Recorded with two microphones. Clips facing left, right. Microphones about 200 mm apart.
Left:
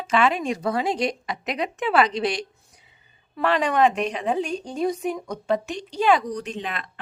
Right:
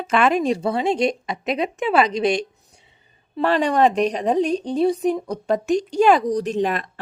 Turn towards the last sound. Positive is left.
turn(degrees=-45)  # may be behind; listen again after turning